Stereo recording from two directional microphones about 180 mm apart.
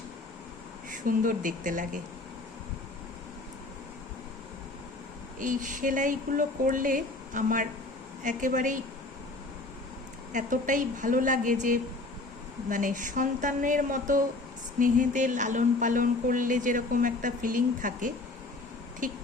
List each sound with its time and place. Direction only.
0.9 s speech: 50° right (ahead or behind)
5.4 s speech: 45° right (ahead or behind)
10.3 s speech: 45° right (ahead or behind)